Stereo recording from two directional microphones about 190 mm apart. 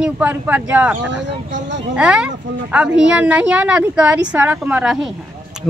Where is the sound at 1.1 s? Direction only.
70° right (ahead or behind).